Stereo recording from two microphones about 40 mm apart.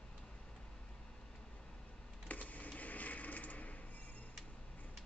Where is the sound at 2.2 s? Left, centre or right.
Left.